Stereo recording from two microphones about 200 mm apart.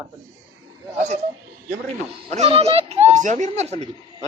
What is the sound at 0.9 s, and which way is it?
Speech, 35° right (ahead or behind).